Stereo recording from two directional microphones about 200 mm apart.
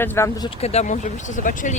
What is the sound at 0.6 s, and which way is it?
Speech, 30° left (ahead or behind).